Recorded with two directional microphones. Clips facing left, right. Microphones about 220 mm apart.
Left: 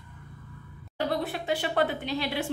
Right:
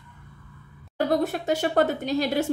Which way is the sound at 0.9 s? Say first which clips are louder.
Right 6 dB; 45° right (ahead or behind).